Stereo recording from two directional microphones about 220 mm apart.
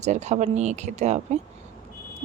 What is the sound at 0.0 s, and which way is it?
Speech, 30° right (ahead or behind).